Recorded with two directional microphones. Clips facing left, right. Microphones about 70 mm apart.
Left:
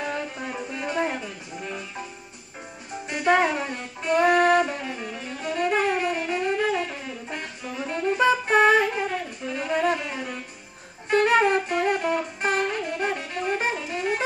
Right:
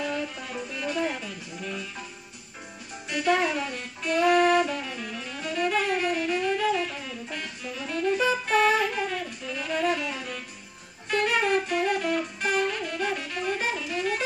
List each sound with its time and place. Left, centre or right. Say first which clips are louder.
0.0 s music: left 1 dB; left
3.1 s saxophone: left 3 dB; left
11.1 s music: left 6 dB; left
11.7 s music: left 2 dB; left